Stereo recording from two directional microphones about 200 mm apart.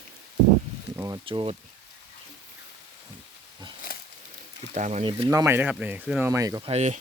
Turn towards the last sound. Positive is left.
turn(degrees=-35)  # may be behind; listen again after turning